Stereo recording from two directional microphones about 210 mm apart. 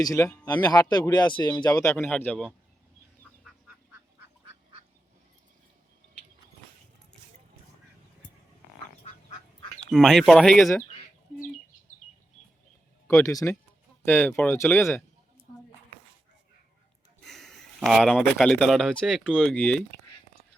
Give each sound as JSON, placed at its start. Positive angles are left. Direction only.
{"t": 0.0, "sound": "speech", "side_deg": 15}
{"t": 9.9, "sound": "speech", "side_deg": 0}
{"t": 13.1, "sound": "speech", "side_deg": 15}
{"t": 17.2, "sound": "speech", "side_deg": 0}